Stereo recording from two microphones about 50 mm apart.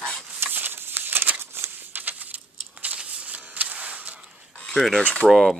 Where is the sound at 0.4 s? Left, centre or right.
Right.